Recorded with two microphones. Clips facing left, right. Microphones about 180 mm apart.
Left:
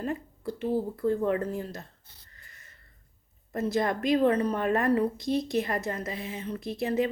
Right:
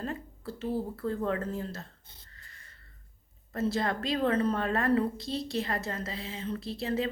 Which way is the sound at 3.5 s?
20° left (ahead or behind).